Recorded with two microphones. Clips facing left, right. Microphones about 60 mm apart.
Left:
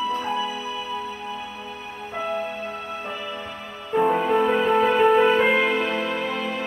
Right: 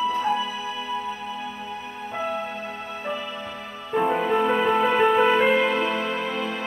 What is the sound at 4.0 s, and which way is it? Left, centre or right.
Music, centre.